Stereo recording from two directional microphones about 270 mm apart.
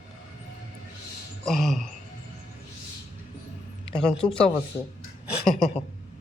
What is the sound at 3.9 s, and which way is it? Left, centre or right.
Speech, left.